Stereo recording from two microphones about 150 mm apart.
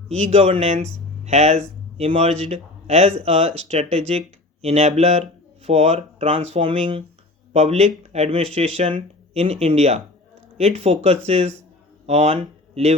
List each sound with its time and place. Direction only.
0.1 s a man's voice: 45° right (ahead or behind)